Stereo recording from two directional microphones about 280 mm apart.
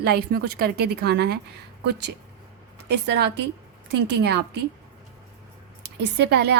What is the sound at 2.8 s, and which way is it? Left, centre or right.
A woman's voice, right.